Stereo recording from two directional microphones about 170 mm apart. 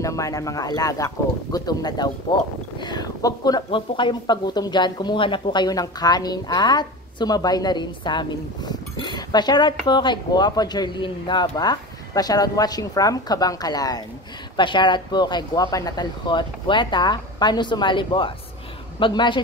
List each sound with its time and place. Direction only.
0.0 s speech: 20° left (ahead or behind)